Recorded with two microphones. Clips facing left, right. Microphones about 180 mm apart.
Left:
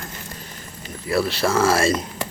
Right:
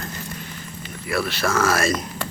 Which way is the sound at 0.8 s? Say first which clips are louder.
Left 3 dB; 35° left (ahead or behind).